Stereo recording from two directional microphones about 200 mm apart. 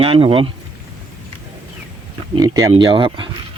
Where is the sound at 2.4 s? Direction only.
20° right (ahead or behind).